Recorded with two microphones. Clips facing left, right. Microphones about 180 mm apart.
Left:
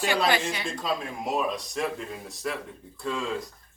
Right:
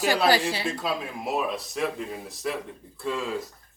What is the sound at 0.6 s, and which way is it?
Speech, 5° right (ahead or behind).